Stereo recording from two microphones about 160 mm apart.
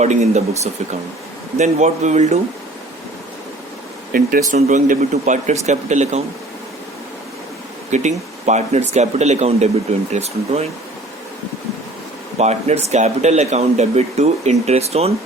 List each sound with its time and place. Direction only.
0.0 s speech: 45° right (ahead or behind)
4.1 s speech: 65° right (ahead or behind)
4.5 s speech: 50° right (ahead or behind)
7.9 s speech: 45° right (ahead or behind)
12.4 s speech: 45° right (ahead or behind)